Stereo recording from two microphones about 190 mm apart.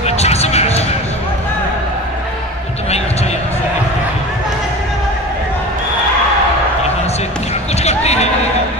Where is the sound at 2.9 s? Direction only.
35° left (ahead or behind).